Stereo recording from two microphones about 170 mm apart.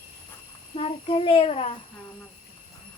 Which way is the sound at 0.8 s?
35° left (ahead or behind).